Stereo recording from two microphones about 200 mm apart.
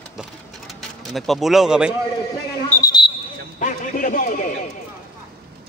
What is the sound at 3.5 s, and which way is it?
A man's voice, 40° left (ahead or behind).